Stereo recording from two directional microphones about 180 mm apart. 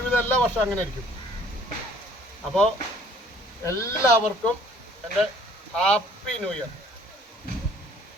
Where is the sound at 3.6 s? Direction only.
15° left (ahead or behind).